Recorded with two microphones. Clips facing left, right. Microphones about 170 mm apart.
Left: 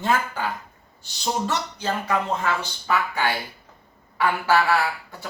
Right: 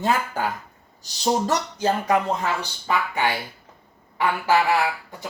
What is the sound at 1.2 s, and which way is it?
Speech, 40° right (ahead or behind).